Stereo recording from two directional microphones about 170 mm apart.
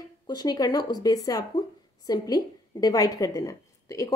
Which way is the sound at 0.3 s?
25° left (ahead or behind).